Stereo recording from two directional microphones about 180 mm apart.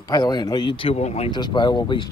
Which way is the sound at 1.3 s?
25° left (ahead or behind).